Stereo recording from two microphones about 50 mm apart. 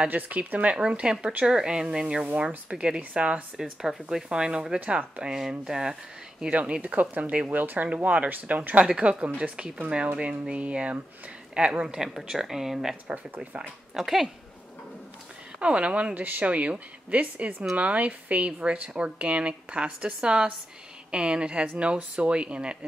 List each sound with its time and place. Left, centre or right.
0.1 s speech: right; by 4.7 s centre
4.7 s speech: right; by 5.9 s centre
6.5 s speech: right
8.8 s speech: centre
13.4 s speech: right
13.9 s speech: centre
15.6 s speech: right
16.2 s speech: right